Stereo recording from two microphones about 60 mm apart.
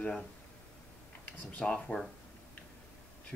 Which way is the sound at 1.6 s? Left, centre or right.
Centre.